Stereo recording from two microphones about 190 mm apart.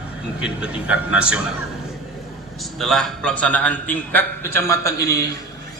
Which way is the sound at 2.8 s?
Centre (ahead or behind).